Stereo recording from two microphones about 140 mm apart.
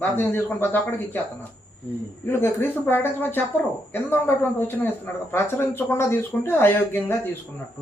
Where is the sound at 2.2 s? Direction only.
15° left (ahead or behind).